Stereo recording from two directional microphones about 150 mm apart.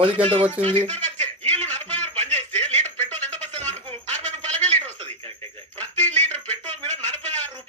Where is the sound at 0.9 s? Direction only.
10° left (ahead or behind).